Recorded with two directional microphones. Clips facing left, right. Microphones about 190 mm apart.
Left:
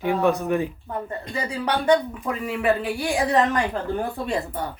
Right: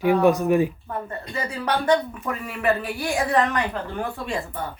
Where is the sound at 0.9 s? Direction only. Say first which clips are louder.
Left 1 dB; 15° left (ahead or behind).